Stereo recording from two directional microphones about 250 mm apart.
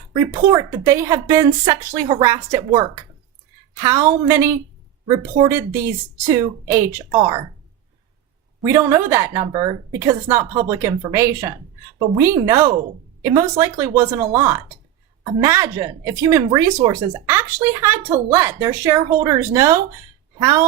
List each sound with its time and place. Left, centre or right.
0.4 s a woman's voice: centre
8.6 s a woman's voice: centre